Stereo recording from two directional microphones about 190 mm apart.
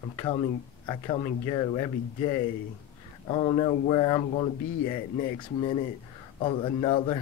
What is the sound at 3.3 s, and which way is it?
Speech, 25° left (ahead or behind).